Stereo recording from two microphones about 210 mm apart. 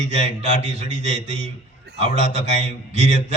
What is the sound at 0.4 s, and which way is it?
A man's voice, 30° right (ahead or behind).